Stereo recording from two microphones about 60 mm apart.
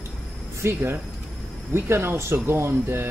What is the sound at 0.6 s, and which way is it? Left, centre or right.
Speech, right.